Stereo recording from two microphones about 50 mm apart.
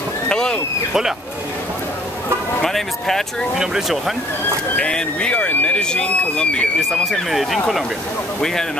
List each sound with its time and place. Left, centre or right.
0.3 s a sound: centre
2.6 s speech: centre
3.5 s speech: centre
4.7 s speech: left
6.8 s speech: centre
8.4 s speech: centre